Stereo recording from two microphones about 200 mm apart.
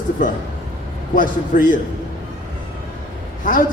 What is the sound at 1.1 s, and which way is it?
Speech, 40° left (ahead or behind).